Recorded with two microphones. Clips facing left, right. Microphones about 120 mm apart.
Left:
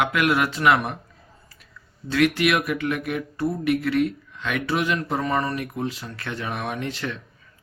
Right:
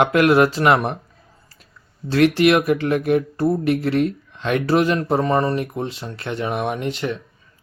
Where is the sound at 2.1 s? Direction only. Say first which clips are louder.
Right 5 dB; 35° right (ahead or behind).